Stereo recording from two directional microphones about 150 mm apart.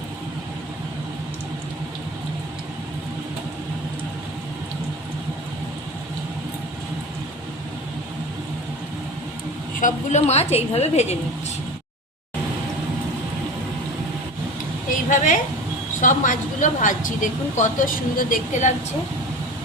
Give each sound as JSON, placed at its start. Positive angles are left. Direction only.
{"t": 9.8, "sound": "a woman's voice", "side_deg": 50}
{"t": 15.1, "sound": "a woman's voice", "side_deg": 60}